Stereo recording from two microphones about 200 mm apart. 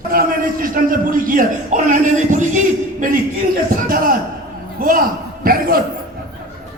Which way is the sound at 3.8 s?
45° right (ahead or behind).